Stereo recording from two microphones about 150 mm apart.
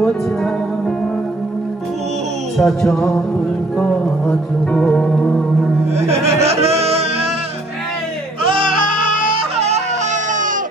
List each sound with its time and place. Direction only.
2.5 s music: centre (ahead or behind)
5.9 s music: 45° right (ahead or behind)